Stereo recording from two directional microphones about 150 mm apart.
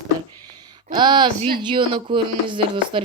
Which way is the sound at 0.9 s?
30° right (ahead or behind).